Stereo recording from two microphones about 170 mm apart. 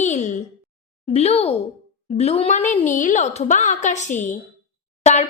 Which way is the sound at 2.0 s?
35° left (ahead or behind).